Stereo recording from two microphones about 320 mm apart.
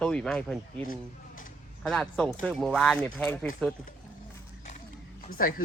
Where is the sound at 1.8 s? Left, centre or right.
Centre.